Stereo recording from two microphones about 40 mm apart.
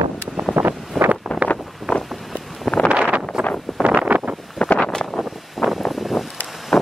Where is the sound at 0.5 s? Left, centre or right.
Right.